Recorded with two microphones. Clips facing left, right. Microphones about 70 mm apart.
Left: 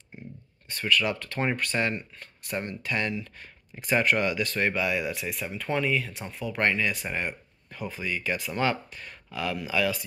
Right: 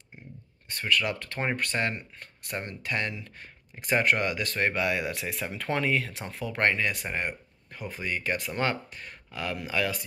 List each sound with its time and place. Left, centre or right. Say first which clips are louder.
0.7 s speech: left 2 dB; right
4.7 s speech: even; right
6.5 s speech: even; right
7.9 s speech: even; right
8.5 s speech: left 2 dB; right